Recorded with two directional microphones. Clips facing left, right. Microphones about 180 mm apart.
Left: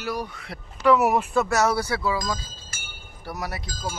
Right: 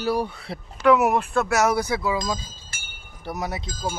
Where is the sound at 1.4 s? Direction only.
10° right (ahead or behind).